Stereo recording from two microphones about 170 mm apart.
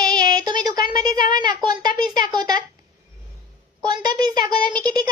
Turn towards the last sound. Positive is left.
turn(degrees=-25)  # may be behind; listen again after turning